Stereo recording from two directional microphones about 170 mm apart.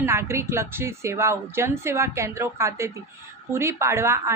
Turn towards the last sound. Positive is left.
turn(degrees=-15)  # may be behind; listen again after turning